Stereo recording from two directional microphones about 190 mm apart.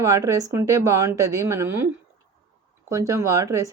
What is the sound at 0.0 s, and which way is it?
A woman's voice, 15° right (ahead or behind).